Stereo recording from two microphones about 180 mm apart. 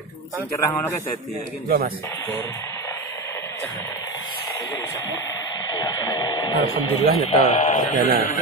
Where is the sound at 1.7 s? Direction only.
55° right (ahead or behind).